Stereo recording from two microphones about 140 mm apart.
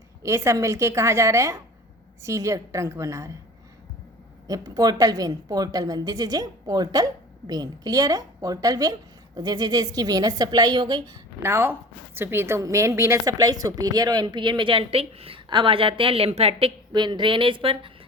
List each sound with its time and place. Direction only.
0.2 s a woman's voice: 20° right (ahead or behind)
4.4 s a woman's voice: 25° right (ahead or behind)
11.4 s a woman's voice: 15° right (ahead or behind); by 17.9 s 40° right (ahead or behind)